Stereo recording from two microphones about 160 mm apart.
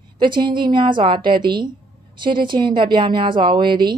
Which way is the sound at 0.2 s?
30° right (ahead or behind).